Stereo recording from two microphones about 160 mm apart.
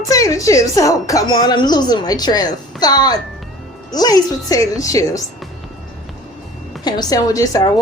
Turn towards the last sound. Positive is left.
turn(degrees=20)  # may be behind; listen again after turning